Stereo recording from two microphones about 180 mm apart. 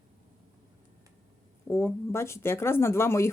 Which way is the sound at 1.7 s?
15° left (ahead or behind).